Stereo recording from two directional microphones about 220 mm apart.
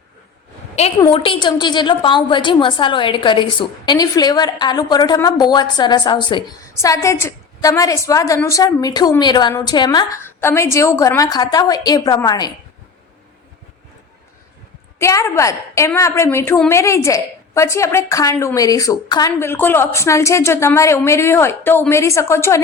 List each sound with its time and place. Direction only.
0.9 s a woman's voice: 20° left (ahead or behind)
14.9 s a woman's voice: 10° left (ahead or behind)